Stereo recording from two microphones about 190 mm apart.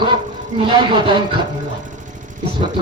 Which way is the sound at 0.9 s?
25° right (ahead or behind).